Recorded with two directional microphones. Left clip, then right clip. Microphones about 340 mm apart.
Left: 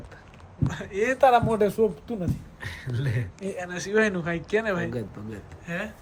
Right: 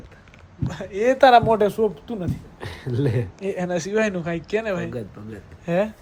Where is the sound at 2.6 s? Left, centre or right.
Centre.